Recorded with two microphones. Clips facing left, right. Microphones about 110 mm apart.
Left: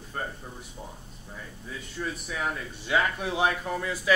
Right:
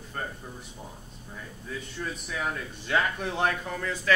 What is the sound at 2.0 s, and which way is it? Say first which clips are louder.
Speech: left 2 dB; 5° left (ahead or behind).